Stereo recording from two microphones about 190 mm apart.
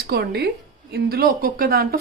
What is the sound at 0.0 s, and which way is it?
A woman's voice, 55° right (ahead or behind).